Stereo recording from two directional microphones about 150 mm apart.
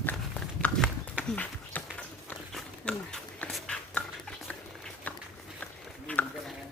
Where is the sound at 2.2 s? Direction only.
5° left (ahead or behind).